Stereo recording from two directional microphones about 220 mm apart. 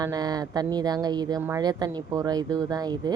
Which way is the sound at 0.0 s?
15° right (ahead or behind).